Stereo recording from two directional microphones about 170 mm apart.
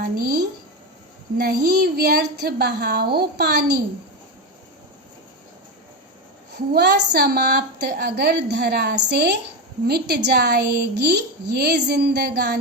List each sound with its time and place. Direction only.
0.0 s a woman's voice: 65° right (ahead or behind)
6.5 s a woman's voice: 75° right (ahead or behind)